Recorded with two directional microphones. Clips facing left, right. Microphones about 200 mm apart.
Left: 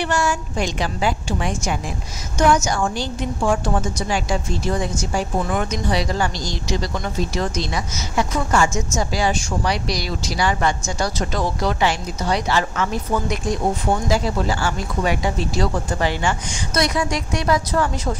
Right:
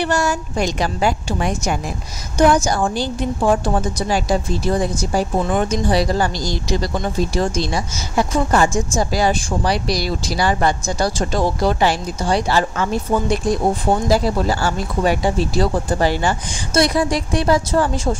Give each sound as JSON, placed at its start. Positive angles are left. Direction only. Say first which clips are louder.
{"t": 0.0, "sound": "a woman's voice", "louder": "right 2 dB", "side_deg": -40}